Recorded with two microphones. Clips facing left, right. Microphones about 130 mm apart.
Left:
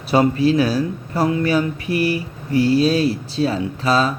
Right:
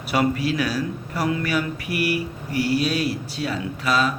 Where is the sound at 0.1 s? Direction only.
30° left (ahead or behind).